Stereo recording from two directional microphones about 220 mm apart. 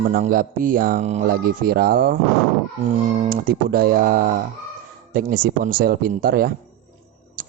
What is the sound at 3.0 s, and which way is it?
Mantra, 35° right (ahead or behind).